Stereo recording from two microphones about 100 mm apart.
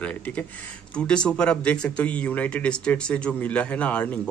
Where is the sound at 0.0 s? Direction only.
15° left (ahead or behind).